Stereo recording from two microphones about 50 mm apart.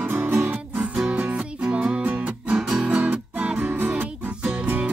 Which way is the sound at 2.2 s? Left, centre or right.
Right.